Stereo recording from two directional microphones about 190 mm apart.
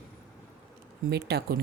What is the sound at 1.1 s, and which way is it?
Speech, 60° right (ahead or behind).